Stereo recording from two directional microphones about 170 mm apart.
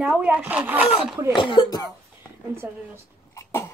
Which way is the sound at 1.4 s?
30° left (ahead or behind).